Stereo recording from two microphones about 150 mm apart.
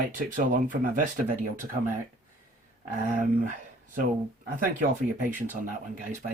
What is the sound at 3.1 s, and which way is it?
Speech, 60° right (ahead or behind).